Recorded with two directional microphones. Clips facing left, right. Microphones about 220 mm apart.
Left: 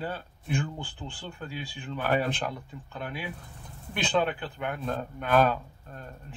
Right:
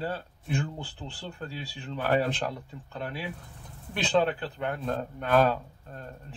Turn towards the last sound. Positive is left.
turn(degrees=-30)  # may be behind; listen again after turning